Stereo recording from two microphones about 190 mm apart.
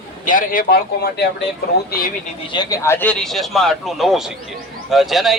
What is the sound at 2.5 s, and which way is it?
Speech, 15° left (ahead or behind).